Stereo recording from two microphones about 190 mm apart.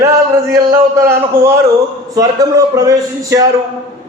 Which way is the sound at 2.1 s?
20° right (ahead or behind).